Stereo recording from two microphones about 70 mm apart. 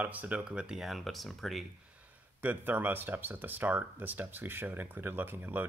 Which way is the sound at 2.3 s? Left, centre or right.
Right.